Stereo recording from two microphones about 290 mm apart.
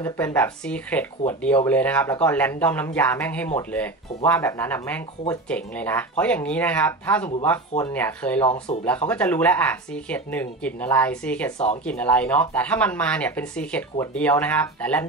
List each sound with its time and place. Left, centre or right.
0.0 s speech: centre
11.5 s speech: left
11.8 s speech: centre